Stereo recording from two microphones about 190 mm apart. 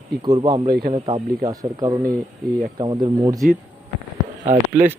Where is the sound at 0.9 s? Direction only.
25° right (ahead or behind).